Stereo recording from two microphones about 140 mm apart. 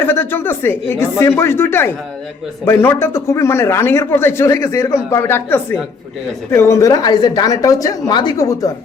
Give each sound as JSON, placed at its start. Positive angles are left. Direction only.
{"t": 0.0, "sound": "a man's voice", "side_deg": 15}